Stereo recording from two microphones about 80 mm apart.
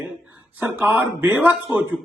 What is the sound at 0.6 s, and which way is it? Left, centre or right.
Speech, right.